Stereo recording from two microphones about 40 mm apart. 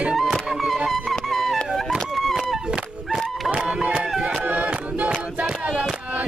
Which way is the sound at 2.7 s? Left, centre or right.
Right.